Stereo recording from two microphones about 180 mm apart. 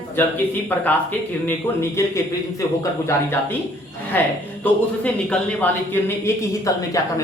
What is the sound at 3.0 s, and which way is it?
Speech, 15° left (ahead or behind).